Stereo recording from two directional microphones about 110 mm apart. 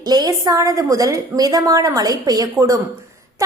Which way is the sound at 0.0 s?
35° right (ahead or behind).